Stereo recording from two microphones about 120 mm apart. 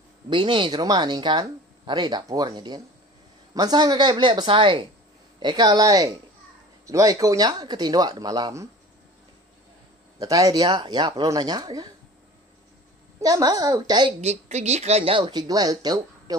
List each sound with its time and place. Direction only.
0.3 s speech: 45° right (ahead or behind)
5.4 s speech: 35° right (ahead or behind)
10.1 s speech: 30° right (ahead or behind)
13.2 s speech: 30° right (ahead or behind)
14.2 s speech: 65° right (ahead or behind); by 15.4 s 45° right (ahead or behind)
15.4 s speech: 30° right (ahead or behind)